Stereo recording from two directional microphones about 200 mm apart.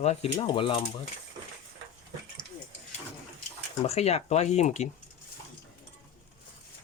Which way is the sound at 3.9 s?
30° left (ahead or behind).